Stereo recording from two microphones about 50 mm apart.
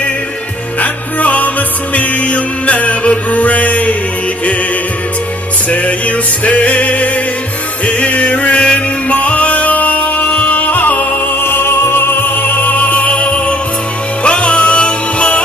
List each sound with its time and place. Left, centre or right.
0.7 s music: left
5.7 s music: left
11.4 s music: left